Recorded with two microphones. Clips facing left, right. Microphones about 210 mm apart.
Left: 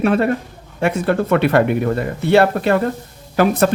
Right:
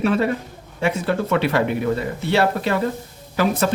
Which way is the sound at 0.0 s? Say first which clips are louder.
Left 3 dB; 55° left (ahead or behind).